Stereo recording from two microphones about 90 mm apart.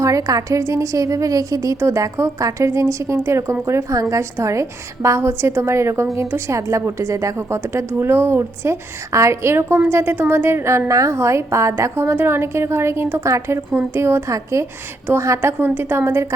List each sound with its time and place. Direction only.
0.0 s a woman's voice: 40° right (ahead or behind)